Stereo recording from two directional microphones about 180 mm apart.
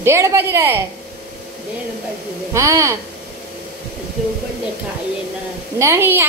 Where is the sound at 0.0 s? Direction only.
15° right (ahead or behind).